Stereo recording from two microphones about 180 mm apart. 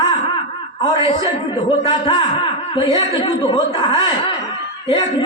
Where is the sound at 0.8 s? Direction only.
25° left (ahead or behind).